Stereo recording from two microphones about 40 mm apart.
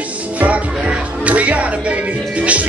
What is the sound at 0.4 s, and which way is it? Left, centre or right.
Speech, right.